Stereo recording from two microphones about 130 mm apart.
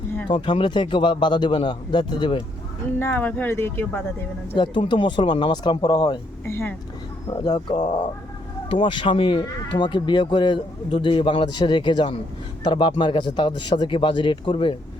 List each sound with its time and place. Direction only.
0.3 s speech: 40° left (ahead or behind)
3.0 s speech: 15° left (ahead or behind)
4.5 s speech: 40° left (ahead or behind)
6.4 s speech: 20° left (ahead or behind)
7.3 s speech: 35° left (ahead or behind)